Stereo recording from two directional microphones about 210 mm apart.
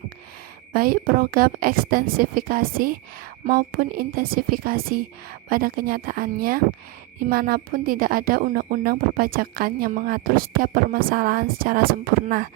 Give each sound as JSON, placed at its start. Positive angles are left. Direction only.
{"t": 0.7, "sound": "speech", "side_deg": -40}